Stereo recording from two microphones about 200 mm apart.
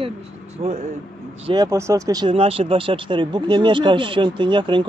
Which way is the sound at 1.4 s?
20° right (ahead or behind).